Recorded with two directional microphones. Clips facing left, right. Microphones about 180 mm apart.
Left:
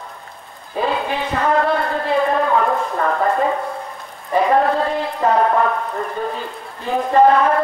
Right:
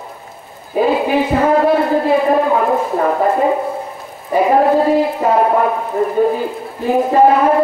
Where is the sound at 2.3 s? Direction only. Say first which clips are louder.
Right 4 dB; 15° right (ahead or behind).